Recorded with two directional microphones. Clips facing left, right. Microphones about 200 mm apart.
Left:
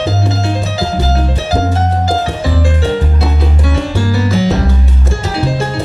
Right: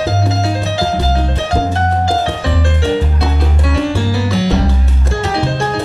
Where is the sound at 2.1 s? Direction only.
Centre (ahead or behind).